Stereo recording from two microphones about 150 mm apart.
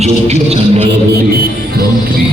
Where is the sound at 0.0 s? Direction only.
45° right (ahead or behind).